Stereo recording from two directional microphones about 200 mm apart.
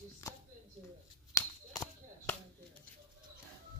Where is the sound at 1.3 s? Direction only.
20° left (ahead or behind).